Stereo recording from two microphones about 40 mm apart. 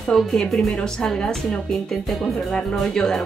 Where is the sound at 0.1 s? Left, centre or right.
Centre.